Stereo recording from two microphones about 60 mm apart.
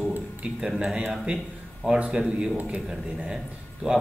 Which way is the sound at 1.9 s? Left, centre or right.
Centre.